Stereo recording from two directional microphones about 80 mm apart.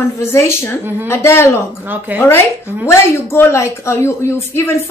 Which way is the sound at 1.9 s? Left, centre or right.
Right.